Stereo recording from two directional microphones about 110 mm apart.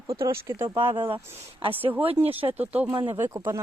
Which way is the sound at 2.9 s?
50° right (ahead or behind).